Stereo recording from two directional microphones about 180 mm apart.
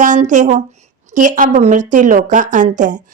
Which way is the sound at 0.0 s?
45° right (ahead or behind).